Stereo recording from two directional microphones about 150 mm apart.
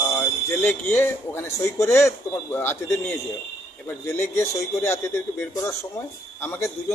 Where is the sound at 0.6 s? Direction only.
15° left (ahead or behind).